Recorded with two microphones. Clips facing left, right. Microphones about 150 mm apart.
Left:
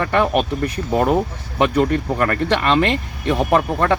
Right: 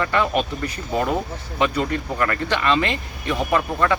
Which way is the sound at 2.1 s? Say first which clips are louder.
Left 3 dB; 45° left (ahead or behind).